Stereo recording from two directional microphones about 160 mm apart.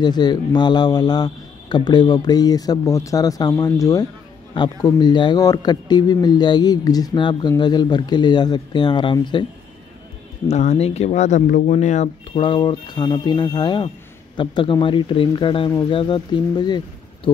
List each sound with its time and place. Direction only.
0.0 s speech: 25° left (ahead or behind)
10.5 s speech: 45° left (ahead or behind); by 17.3 s 25° left (ahead or behind)